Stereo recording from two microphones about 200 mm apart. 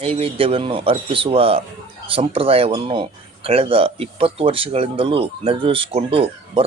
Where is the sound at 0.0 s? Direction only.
30° right (ahead or behind).